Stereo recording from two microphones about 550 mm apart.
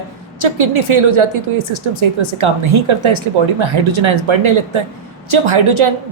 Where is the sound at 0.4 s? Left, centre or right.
Right.